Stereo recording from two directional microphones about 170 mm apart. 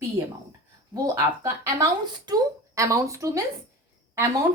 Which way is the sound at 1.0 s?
20° right (ahead or behind).